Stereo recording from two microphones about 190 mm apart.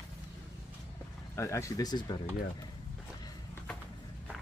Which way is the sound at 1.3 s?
15° left (ahead or behind).